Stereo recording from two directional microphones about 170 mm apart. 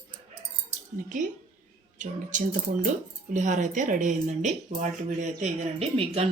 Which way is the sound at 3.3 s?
45° right (ahead or behind).